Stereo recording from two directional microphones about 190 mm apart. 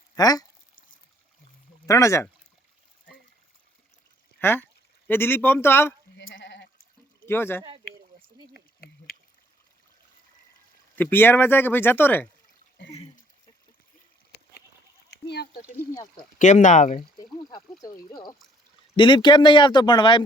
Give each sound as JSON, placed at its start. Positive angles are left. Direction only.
{"t": 0.2, "sound": "speech", "side_deg": 20}
{"t": 1.9, "sound": "speech", "side_deg": 15}
{"t": 4.4, "sound": "a sound", "side_deg": 10}
{"t": 5.0, "sound": "speech", "side_deg": 10}
{"t": 6.3, "sound": "sheep", "side_deg": 65}
{"t": 7.3, "sound": "speech", "side_deg": 10}
{"t": 8.5, "sound": "a sound", "side_deg": 55}
{"t": 10.9, "sound": "speech", "side_deg": 10}
{"t": 15.1, "sound": "a sound", "side_deg": 60}
{"t": 16.4, "sound": "speech", "side_deg": 40}
{"t": 18.1, "sound": "speech", "side_deg": 20}